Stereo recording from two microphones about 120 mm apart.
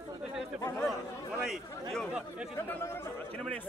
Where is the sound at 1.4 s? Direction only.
5° left (ahead or behind).